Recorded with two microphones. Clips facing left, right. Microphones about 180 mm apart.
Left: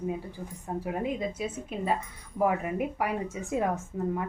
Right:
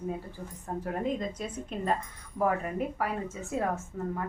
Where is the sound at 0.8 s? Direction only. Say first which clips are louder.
Even; 5° left (ahead or behind).